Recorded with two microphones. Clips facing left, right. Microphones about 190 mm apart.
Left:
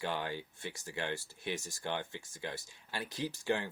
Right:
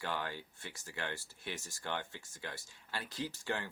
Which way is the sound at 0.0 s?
20° left (ahead or behind).